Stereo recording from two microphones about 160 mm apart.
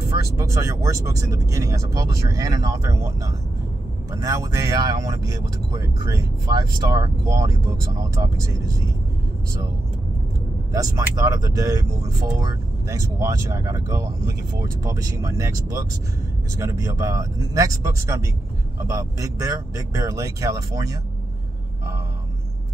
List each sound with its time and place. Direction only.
0.2 s speech: 20° right (ahead or behind)
10.7 s speech: 20° right (ahead or behind)